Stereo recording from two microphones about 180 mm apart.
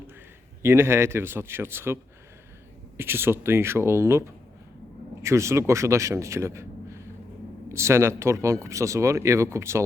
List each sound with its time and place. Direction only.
0.6 s speech: 15° right (ahead or behind)
3.0 s speech: 10° right (ahead or behind)
5.2 s a man's voice: 15° right (ahead or behind)